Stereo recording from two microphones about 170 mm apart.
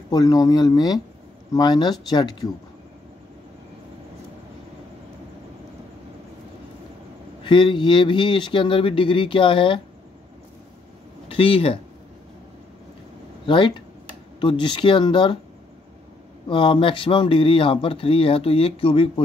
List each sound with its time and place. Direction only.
0.1 s speech: 20° left (ahead or behind)
7.4 s speech: 30° left (ahead or behind)
11.2 s speech: 30° left (ahead or behind)
13.5 s speech: 30° left (ahead or behind)
16.4 s speech: 30° left (ahead or behind)